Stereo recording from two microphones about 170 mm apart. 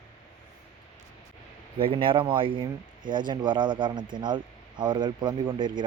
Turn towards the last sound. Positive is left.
turn(degrees=-25)  # may be behind; listen again after turning